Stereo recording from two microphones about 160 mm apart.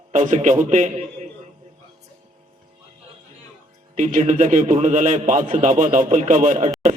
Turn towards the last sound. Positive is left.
turn(degrees=-50)  # may be behind; listen again after turning